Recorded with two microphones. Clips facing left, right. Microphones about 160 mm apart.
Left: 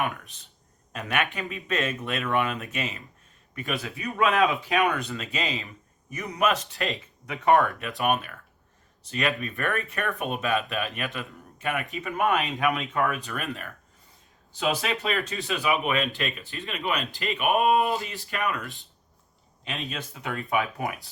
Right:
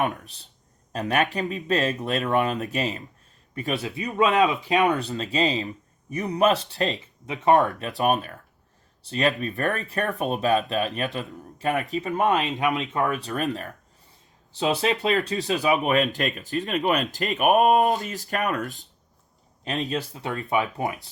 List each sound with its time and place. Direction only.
0.0 s speech: 35° right (ahead or behind)